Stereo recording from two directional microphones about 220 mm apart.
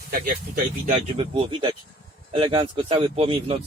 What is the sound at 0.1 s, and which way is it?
Speech, 40° right (ahead or behind).